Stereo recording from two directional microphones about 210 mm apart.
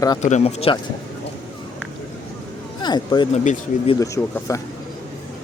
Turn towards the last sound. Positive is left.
turn(degrees=15)  # may be behind; listen again after turning